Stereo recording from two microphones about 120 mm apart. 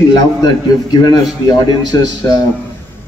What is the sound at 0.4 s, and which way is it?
A man's voice, 35° left (ahead or behind).